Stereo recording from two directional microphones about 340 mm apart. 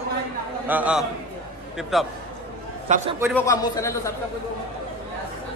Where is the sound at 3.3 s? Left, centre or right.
Centre.